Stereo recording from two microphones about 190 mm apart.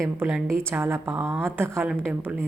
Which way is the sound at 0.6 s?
10° right (ahead or behind).